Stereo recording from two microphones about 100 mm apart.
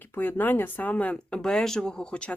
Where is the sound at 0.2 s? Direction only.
20° left (ahead or behind).